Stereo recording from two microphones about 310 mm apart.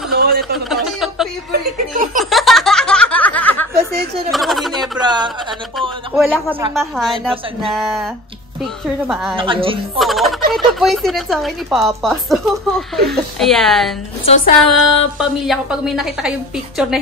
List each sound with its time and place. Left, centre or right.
0.1 s a sound: right
0.4 s a sound: centre
1.5 s speech: right
2.1 s snicker: centre
4.3 s a sound: centre
5.0 s speech: centre
5.8 s a man's voice: centre
9.4 s a woman's voice: centre
9.9 s speech: centre
14.2 s speech: left
15.1 s speech: centre